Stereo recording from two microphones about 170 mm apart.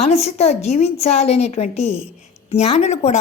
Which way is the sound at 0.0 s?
40° left (ahead or behind).